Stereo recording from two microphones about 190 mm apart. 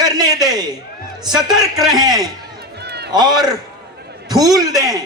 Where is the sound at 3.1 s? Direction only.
20° right (ahead or behind).